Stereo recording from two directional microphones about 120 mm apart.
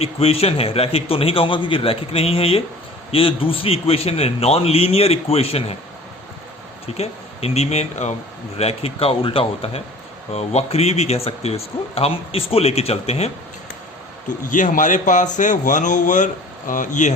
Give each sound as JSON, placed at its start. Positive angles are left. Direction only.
{"t": 0.0, "sound": "a man's voice", "side_deg": 55}
{"t": 6.8, "sound": "speech", "side_deg": 60}
{"t": 8.5, "sound": "speech", "side_deg": 55}
{"t": 14.3, "sound": "a man's voice", "side_deg": 90}